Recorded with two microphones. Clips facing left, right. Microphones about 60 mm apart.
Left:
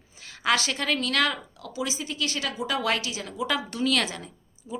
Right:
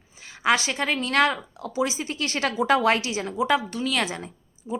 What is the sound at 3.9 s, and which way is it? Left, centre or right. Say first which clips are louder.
Speech: right 1 dB; right.